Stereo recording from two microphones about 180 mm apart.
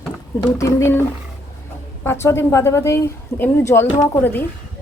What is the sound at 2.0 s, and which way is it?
Speech, 15° left (ahead or behind).